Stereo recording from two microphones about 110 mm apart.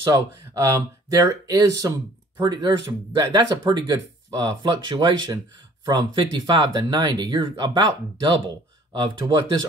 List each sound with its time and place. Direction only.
0.1 s speech: 30° right (ahead or behind)